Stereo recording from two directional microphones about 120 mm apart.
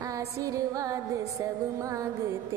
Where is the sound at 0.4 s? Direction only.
25° right (ahead or behind).